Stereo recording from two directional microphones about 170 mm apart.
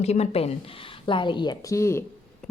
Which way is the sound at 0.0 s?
40° left (ahead or behind).